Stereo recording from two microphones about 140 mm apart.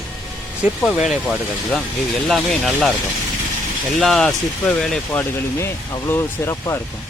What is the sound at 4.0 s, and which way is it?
Speech, 5° left (ahead or behind).